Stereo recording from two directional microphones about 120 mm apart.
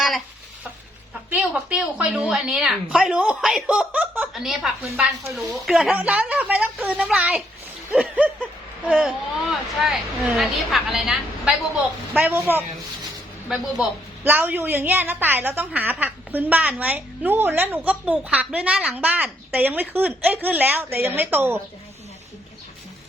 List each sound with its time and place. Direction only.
1.3 s a woman's voice: 10° right (ahead or behind)
4.4 s a woman's voice: centre (ahead or behind)
12.1 s a woman's voice: 15° right (ahead or behind)
14.3 s a woman's voice: 15° right (ahead or behind)